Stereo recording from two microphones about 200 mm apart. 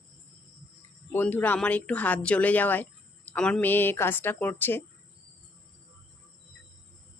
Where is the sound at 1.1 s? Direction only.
10° left (ahead or behind).